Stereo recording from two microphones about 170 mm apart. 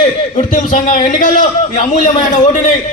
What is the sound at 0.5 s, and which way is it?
A man's voice, 50° left (ahead or behind).